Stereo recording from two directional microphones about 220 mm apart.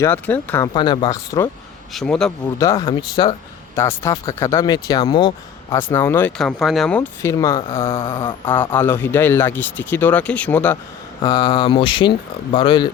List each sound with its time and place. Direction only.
0.0 s speech: 10° left (ahead or behind)
0.7 s speech: 20° left (ahead or behind)
1.9 s speech: centre (ahead or behind)
2.4 s speech: 15° left (ahead or behind)
8.0 s speech: 20° left (ahead or behind)
8.7 s speech: 10° left (ahead or behind)
11.2 s speech: 15° left (ahead or behind)